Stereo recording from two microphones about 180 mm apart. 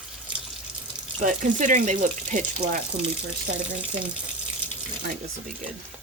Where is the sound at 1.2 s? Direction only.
45° right (ahead or behind).